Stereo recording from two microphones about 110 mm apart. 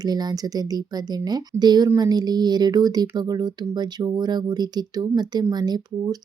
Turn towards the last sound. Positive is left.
turn(degrees=-40)  # may be behind; listen again after turning